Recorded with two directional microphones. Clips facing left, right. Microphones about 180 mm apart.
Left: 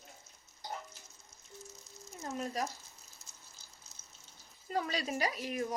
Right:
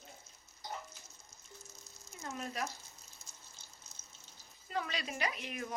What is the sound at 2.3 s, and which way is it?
Speech, 35° left (ahead or behind).